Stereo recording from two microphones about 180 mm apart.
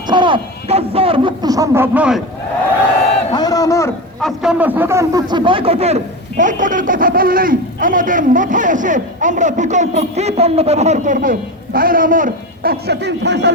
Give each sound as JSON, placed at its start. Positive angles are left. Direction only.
{"t": 0.1, "sound": "speech", "side_deg": -25}
{"t": 3.3, "sound": "a man's voice", "side_deg": 20}
{"t": 4.2, "sound": "speech", "side_deg": 0}
{"t": 12.9, "sound": "speech", "side_deg": -70}